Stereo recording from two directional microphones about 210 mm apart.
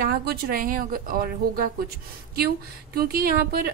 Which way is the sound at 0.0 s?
45° right (ahead or behind).